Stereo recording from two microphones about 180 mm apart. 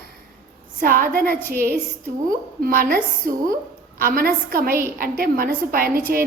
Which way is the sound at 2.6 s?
55° right (ahead or behind).